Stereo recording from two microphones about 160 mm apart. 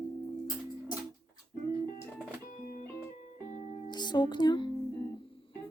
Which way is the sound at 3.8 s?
25° left (ahead or behind).